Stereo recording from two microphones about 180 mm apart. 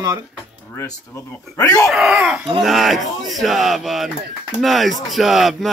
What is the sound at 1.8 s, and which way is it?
Mantra, 5° right (ahead or behind).